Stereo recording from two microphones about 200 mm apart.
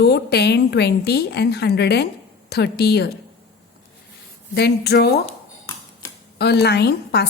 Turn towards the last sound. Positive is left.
turn(degrees=55)  # may be behind; listen again after turning